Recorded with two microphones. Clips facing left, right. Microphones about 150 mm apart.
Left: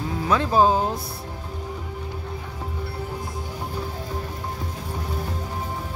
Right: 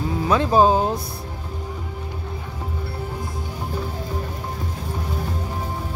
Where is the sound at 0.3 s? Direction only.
20° right (ahead or behind).